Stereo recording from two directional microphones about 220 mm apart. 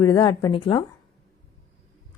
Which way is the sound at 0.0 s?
20° left (ahead or behind).